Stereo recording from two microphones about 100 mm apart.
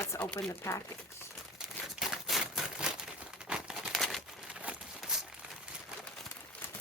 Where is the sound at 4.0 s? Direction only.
5° left (ahead or behind).